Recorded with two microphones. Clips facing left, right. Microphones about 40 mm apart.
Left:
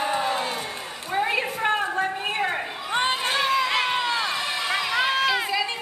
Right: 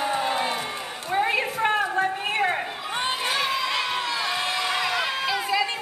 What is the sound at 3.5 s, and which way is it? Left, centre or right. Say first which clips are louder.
Crowd: left 3 dB; left.